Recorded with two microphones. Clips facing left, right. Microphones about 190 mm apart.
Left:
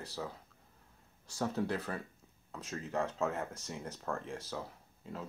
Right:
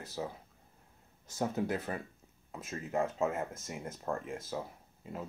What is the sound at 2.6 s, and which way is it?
Speech, 5° right (ahead or behind).